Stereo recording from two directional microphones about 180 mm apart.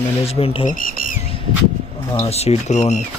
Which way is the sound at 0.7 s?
50° left (ahead or behind).